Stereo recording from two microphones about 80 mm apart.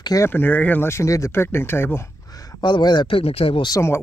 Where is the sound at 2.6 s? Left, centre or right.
Left.